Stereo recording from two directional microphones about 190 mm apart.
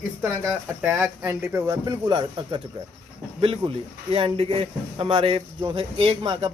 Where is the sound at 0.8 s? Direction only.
Centre (ahead or behind).